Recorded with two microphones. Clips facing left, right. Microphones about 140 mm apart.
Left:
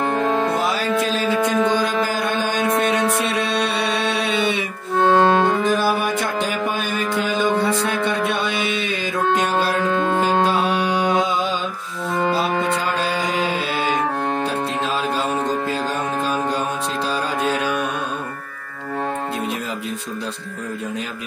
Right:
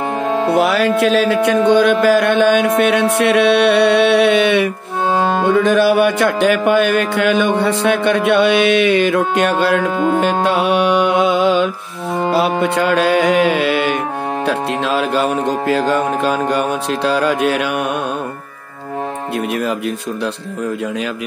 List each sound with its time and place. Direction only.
0.2 s music: 15° right (ahead or behind)
0.6 s music: 70° right (ahead or behind)
2.8 s mantra: 70° right (ahead or behind)
5.0 s music: 10° right (ahead or behind)
5.6 s music: 70° right (ahead or behind)
9.9 s music: 15° right (ahead or behind)
10.4 s music: 70° right (ahead or behind)